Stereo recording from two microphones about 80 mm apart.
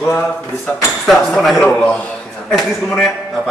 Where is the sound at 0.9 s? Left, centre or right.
Centre.